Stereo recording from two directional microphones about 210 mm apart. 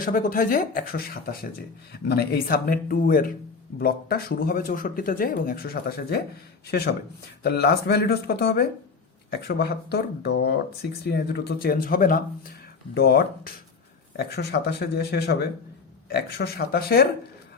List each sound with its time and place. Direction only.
0.0 s speech: 40° left (ahead or behind)